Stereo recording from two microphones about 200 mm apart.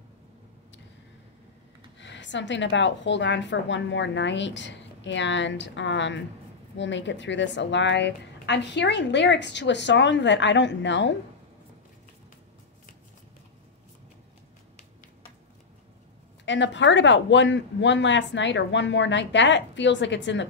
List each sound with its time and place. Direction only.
2.0 s a woman's voice: 65° left (ahead or behind)
16.4 s a woman's voice: 65° left (ahead or behind)